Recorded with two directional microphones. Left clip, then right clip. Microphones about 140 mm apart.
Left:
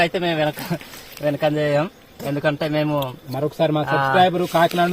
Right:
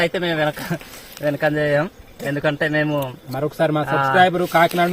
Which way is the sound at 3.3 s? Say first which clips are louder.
Right 1 dB; 15° left (ahead or behind).